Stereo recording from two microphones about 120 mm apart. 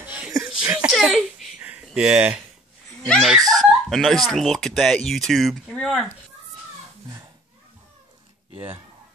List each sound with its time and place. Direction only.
0.7 s a sound: 20° right (ahead or behind)
0.9 s belly laugh: centre (ahead or behind)
1.6 s a sound: 10° right (ahead or behind)
2.0 s speech: 10° right (ahead or behind)
3.3 s speech: 30° right (ahead or behind)
3.9 s speech: centre (ahead or behind)